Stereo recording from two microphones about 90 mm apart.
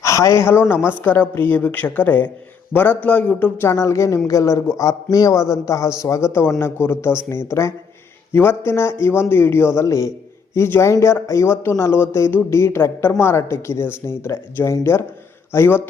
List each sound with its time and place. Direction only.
0.0 s a woman's voice: 35° left (ahead or behind); by 3.5 s 15° left (ahead or behind)
3.6 s a man's voice: 30° left (ahead or behind)